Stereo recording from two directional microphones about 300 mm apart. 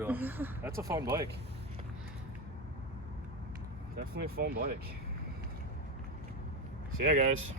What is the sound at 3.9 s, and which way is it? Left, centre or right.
Speech, right.